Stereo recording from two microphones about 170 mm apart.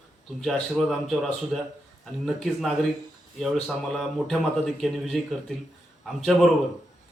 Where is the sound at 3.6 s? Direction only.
Centre (ahead or behind).